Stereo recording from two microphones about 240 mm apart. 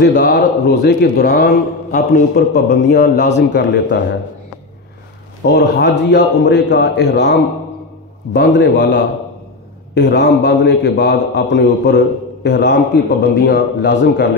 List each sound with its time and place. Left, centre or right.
0.0 s a man's voice: left
5.4 s a man's voice: left